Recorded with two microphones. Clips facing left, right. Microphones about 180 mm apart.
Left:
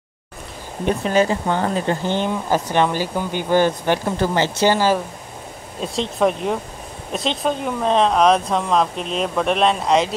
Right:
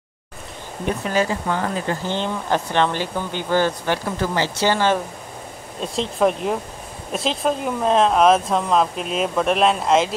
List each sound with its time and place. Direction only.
0.8 s speech: 25° left (ahead or behind)
2.1 s speech: 10° left (ahead or behind)
4.7 s speech: 5° left (ahead or behind)